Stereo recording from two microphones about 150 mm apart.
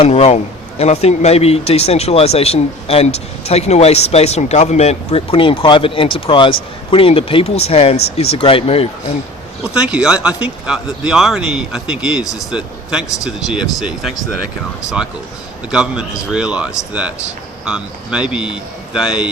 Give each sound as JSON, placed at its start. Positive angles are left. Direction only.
{"t": 0.0, "sound": "a man's voice", "side_deg": 45}
{"t": 9.7, "sound": "speech", "side_deg": -5}
{"t": 15.7, "sound": "speech", "side_deg": -5}